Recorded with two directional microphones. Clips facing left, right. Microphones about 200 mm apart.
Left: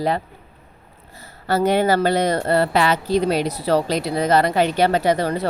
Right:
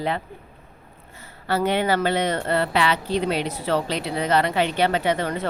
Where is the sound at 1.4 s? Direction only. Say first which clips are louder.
Left 4 dB; 40° left (ahead or behind).